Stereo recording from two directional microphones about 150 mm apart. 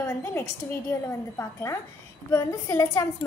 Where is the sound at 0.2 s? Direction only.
15° left (ahead or behind).